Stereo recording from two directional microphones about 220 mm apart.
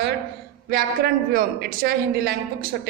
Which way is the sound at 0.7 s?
45° right (ahead or behind).